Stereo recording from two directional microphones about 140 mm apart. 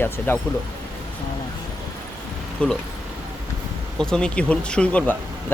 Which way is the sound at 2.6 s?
10° left (ahead or behind).